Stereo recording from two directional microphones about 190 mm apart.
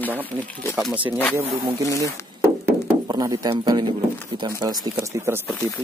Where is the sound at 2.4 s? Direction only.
20° right (ahead or behind).